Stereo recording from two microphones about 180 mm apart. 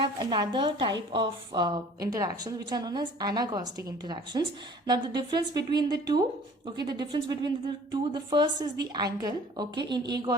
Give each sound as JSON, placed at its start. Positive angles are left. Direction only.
{"t": 0.0, "sound": "a woman's voice", "side_deg": -25}